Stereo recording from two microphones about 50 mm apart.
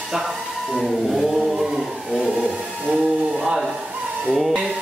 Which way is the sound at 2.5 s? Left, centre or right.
Centre.